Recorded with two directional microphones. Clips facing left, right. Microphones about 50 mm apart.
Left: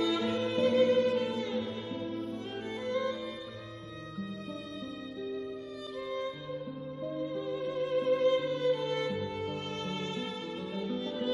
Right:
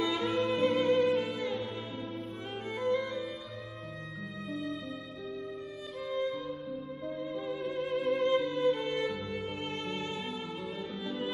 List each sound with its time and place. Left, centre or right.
0.0 s music: right
7.3 s music: right